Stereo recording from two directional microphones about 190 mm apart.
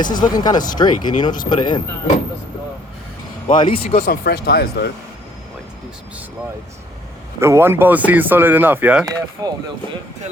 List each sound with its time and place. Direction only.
0.0 s speech: 20° left (ahead or behind)
3.4 s speech: 25° left (ahead or behind)
3.8 s speech: 45° left (ahead or behind)
7.3 s speech: 15° right (ahead or behind)
9.4 s speech: 20° right (ahead or behind)